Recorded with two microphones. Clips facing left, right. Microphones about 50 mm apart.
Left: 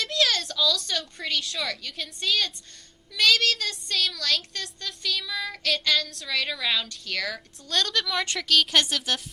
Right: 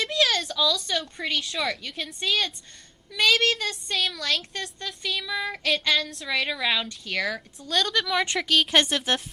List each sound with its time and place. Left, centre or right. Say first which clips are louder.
0.0 s a woman's voice: right 1 dB; centre
9.1 s speech: right 3 dB; right